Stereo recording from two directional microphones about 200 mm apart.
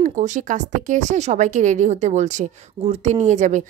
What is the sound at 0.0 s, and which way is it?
Speech, 40° right (ahead or behind).